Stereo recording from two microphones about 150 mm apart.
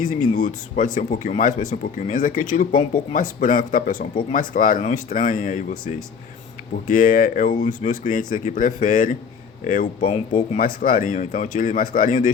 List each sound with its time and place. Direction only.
0.0 s speech: 55° left (ahead or behind)
6.8 s speech: 60° left (ahead or behind)